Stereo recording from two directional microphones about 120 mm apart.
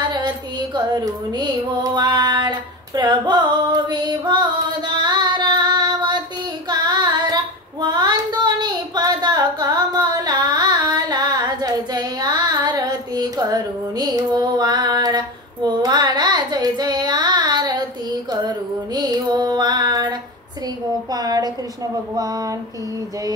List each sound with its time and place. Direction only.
0.0 s music: 35° right (ahead or behind)
6.7 s child singing: 35° right (ahead or behind)
21.1 s a sound: 35° right (ahead or behind)